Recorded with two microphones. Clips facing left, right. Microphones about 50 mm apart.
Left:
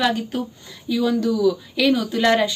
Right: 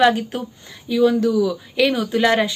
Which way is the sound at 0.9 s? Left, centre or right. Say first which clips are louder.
Right 4 dB; centre.